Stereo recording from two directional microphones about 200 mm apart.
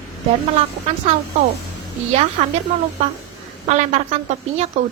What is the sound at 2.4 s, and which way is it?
Speech, 35° right (ahead or behind).